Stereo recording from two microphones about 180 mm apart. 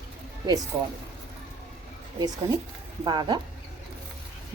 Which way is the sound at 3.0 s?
25° right (ahead or behind).